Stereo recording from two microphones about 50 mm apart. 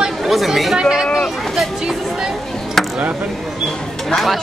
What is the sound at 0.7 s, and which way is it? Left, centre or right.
Speech, centre.